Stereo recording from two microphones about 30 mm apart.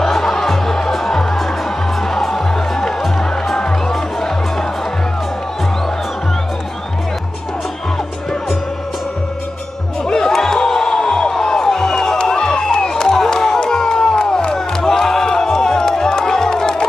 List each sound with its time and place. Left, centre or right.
0.1 s music: centre
3.5 s music: left
10.0 s music: left